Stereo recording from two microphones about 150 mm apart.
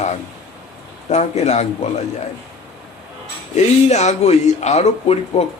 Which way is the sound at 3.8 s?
50° left (ahead or behind).